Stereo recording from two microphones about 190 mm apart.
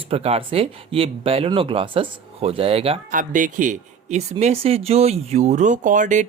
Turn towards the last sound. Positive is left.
turn(degrees=-40)  # may be behind; listen again after turning